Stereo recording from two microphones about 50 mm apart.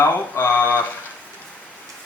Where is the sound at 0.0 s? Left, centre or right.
Left.